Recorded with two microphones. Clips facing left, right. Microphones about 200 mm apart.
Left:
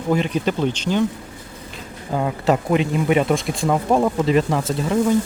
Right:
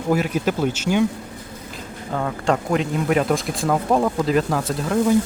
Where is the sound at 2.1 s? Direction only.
10° left (ahead or behind).